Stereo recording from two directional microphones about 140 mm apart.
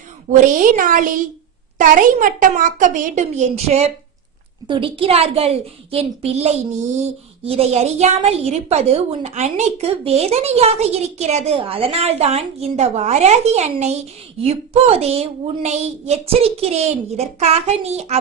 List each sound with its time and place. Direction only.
0.3 s a woman's voice: 65° right (ahead or behind); by 3.9 s 50° right (ahead or behind)
4.7 s a woman's voice: 40° right (ahead or behind)